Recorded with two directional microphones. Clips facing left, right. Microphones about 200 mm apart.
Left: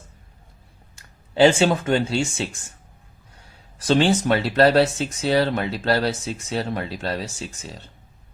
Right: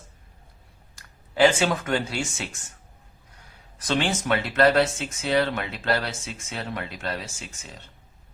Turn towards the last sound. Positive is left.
turn(degrees=35)  # may be behind; listen again after turning